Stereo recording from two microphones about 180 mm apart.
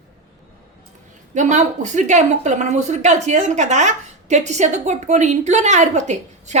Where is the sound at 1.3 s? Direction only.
40° right (ahead or behind).